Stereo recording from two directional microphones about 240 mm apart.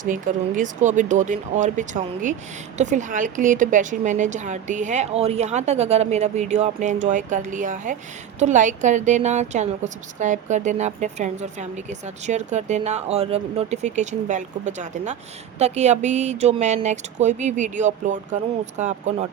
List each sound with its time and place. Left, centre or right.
0.0 s a woman's voice: right